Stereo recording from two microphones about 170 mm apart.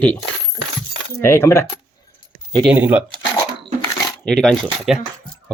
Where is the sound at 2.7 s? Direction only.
10° right (ahead or behind).